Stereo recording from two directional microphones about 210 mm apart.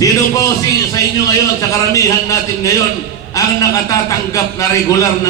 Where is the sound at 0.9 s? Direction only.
15° left (ahead or behind).